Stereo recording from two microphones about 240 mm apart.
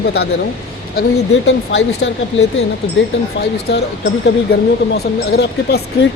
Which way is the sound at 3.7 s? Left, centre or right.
Left.